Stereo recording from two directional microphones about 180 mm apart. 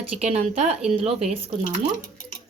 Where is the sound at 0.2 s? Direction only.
35° right (ahead or behind).